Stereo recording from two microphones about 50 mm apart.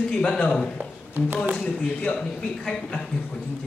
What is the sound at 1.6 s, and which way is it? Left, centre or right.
Speech, left.